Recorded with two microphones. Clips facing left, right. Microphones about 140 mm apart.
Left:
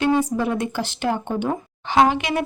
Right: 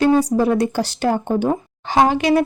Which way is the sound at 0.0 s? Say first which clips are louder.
Right 5 dB; 35° right (ahead or behind).